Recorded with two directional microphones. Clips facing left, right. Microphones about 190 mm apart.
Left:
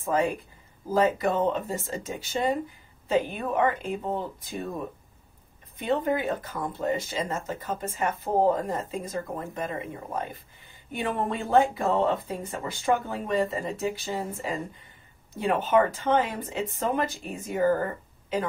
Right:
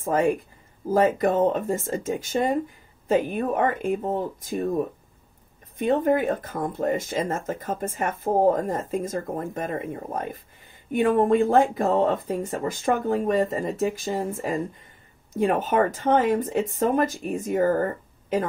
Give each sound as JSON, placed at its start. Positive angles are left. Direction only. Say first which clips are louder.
{"t": 0.9, "sound": "speech", "louder": "right 3 dB", "side_deg": -45}
{"t": 5.8, "sound": "speech", "louder": "right 5 dB", "side_deg": -45}